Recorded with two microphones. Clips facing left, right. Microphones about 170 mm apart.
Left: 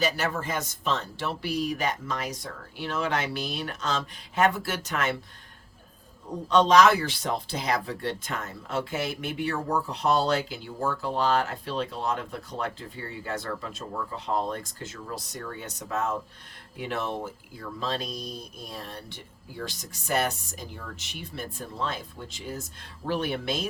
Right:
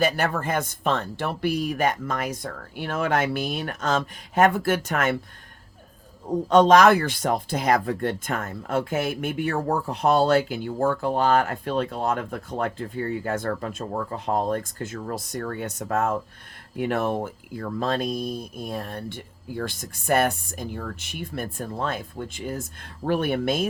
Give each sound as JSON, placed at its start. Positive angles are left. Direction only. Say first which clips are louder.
{"t": 0.0, "sound": "speech", "louder": "right 4 dB", "side_deg": -55}
{"t": 6.5, "sound": "speech", "louder": "right 4 dB", "side_deg": -50}